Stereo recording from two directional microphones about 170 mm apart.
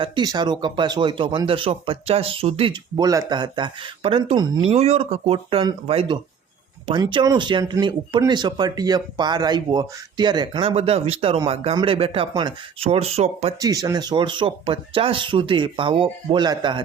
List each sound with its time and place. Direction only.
0.0 s speech: 25° right (ahead or behind)
13.6 s speech: 20° right (ahead or behind)